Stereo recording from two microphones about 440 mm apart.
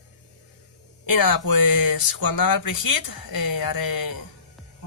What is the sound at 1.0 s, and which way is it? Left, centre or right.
Speech, left.